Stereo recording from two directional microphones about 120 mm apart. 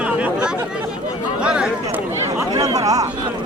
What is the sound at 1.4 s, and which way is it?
Chatter, 10° right (ahead or behind).